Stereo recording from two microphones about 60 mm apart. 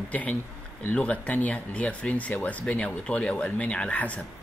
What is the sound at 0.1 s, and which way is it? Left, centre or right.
Speech, left.